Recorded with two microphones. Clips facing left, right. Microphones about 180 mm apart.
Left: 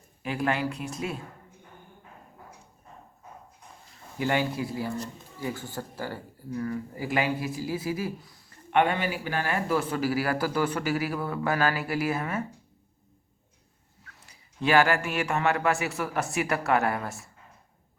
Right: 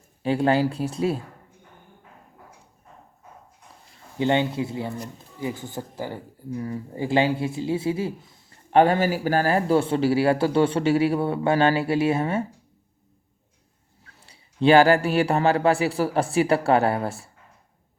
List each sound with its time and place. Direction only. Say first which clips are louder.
0.2 s a man's voice: right 8 dB; 30° right (ahead or behind)
4.2 s speech: right 5 dB; 25° right (ahead or behind)
14.0 s a man's voice: right 1 dB; 30° right (ahead or behind)